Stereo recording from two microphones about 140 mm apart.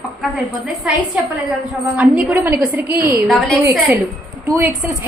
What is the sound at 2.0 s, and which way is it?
A woman's voice, 10° right (ahead or behind).